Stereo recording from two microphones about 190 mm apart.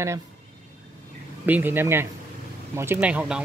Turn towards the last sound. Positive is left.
turn(degrees=-5)  # may be behind; listen again after turning